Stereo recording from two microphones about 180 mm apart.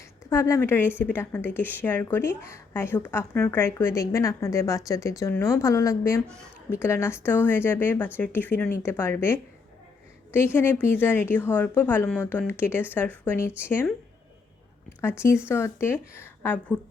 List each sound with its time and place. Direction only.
0.3 s a woman's voice: 15° left (ahead or behind)
15.4 s a woman's voice: 15° left (ahead or behind)